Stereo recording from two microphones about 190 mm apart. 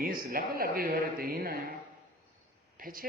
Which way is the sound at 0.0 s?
50° right (ahead or behind).